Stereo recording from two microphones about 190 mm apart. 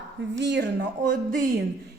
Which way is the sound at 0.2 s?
65° right (ahead or behind).